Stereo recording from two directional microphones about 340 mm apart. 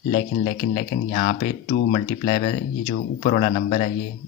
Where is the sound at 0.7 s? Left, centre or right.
Left.